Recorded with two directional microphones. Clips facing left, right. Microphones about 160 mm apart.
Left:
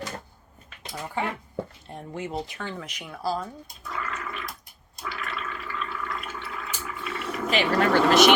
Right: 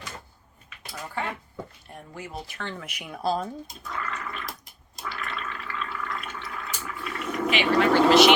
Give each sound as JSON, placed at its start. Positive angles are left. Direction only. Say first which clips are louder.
{"t": 1.2, "sound": "speech", "louder": "left 3 dB", "side_deg": 20}
{"t": 2.6, "sound": "speech", "louder": "left 1 dB", "side_deg": 10}
{"t": 2.8, "sound": "speech", "louder": "right 4 dB", "side_deg": -10}
{"t": 3.8, "sound": "toilet flush", "louder": "left 1 dB", "side_deg": 0}
{"t": 4.4, "sound": "a sound", "louder": "right 1 dB", "side_deg": -90}
{"t": 5.2, "sound": "water", "louder": "left 1 dB", "side_deg": 5}
{"t": 6.8, "sound": "vehicle", "louder": "even", "side_deg": 0}
{"t": 7.5, "sound": "speech", "louder": "even", "side_deg": 45}